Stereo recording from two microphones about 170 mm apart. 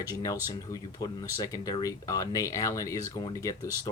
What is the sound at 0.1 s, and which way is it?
Speech, 20° left (ahead or behind).